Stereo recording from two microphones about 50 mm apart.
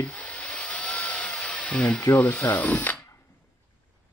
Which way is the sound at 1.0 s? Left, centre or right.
Left.